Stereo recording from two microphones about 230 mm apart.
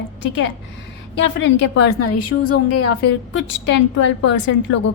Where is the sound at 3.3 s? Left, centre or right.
Left.